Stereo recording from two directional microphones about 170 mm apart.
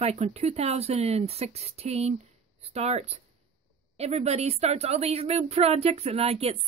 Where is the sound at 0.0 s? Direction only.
40° right (ahead or behind).